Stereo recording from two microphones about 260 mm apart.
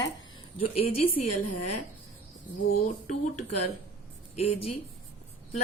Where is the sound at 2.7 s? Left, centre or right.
Left.